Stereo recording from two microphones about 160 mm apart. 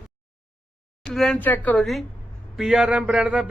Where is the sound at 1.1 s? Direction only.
5° left (ahead or behind).